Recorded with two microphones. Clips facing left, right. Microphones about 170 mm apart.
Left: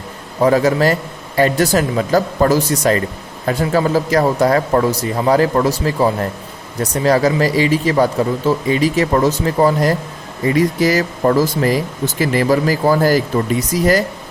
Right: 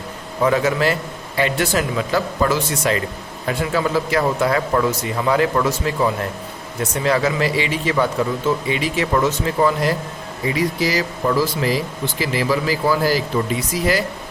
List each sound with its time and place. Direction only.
0.4 s speech: 40° left (ahead or behind)
10.4 s speech: 50° left (ahead or behind)